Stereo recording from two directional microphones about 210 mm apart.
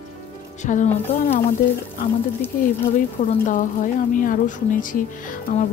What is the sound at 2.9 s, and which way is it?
Speech, 35° left (ahead or behind).